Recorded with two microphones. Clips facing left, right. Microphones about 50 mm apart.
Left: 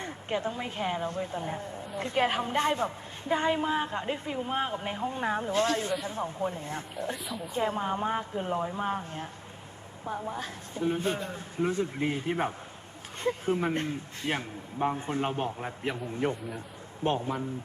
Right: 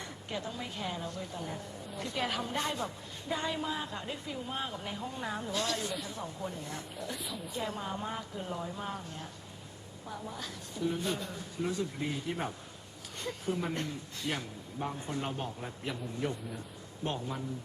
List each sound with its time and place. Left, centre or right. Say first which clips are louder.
0.0 s a woman's voice: left 7 dB; left
7.3 s a woman's voice: left 4 dB; centre
7.5 s a woman's voice: left 8 dB; left